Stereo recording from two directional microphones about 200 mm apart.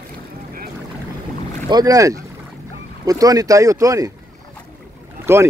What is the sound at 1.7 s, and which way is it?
Speech, 20° right (ahead or behind).